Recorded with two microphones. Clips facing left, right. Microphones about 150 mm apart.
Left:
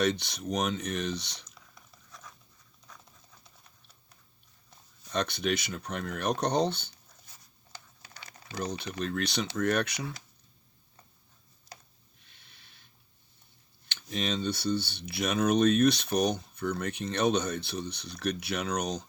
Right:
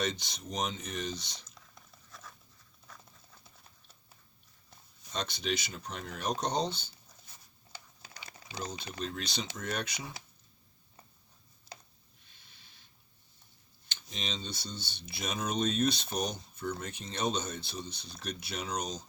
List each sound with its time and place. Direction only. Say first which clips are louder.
0.0 s speech: left 7 dB; 60° left (ahead or behind)
2.1 s dog: left 1 dB; centre (ahead or behind)
5.1 s speech: left 5 dB; 60° left (ahead or behind)
8.5 s speech: left 5 dB; 60° left (ahead or behind)
13.8 s speech: left 9 dB; 60° left (ahead or behind)